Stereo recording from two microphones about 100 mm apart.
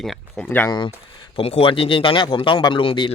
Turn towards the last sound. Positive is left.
turn(degrees=55)  # may be behind; listen again after turning